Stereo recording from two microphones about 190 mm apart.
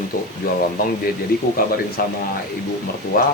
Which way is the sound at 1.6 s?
50° left (ahead or behind).